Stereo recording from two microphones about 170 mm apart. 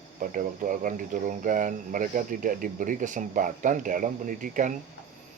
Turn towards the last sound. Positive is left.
turn(degrees=-50)  # may be behind; listen again after turning